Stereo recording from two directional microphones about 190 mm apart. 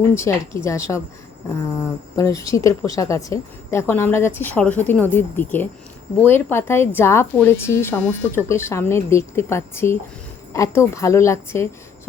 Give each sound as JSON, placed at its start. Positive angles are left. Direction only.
{"t": 0.2, "sound": "speech", "side_deg": 15}